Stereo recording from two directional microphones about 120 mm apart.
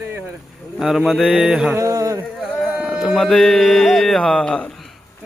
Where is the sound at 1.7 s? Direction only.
25° right (ahead or behind).